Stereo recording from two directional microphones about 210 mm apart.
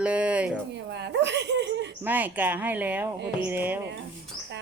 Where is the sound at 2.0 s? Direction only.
10° right (ahead or behind).